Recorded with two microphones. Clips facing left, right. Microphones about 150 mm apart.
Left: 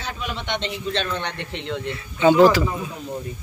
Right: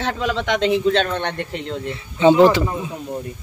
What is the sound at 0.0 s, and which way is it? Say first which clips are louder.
Speech: right 8 dB; 90° right.